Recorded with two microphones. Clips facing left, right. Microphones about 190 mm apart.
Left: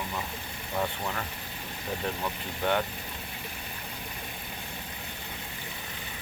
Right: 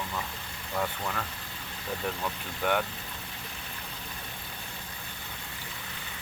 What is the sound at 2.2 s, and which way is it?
Speech, 15° left (ahead or behind).